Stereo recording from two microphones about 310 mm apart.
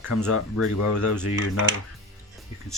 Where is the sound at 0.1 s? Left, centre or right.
Left.